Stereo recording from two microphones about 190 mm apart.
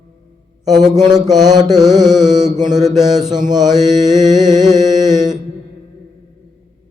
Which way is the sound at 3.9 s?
40° right (ahead or behind).